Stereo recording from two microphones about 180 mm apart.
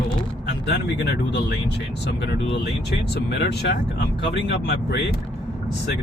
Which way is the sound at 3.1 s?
65° left (ahead or behind).